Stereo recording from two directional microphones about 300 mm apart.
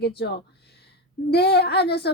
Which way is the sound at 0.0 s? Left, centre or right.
Left.